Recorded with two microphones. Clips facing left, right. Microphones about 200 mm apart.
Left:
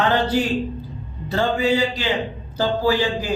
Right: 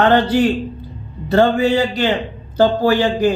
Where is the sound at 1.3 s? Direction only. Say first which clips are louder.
Right 6 dB; 60° right (ahead or behind).